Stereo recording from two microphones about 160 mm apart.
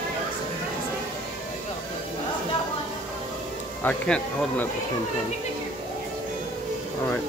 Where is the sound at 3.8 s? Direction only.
10° left (ahead or behind).